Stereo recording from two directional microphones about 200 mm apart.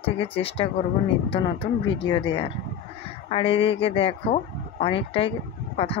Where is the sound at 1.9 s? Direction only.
30° left (ahead or behind).